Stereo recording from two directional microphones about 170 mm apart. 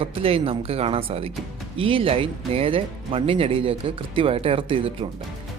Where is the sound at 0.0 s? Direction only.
35° right (ahead or behind).